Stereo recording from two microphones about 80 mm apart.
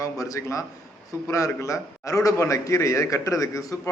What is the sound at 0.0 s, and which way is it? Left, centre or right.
A man's voice, left.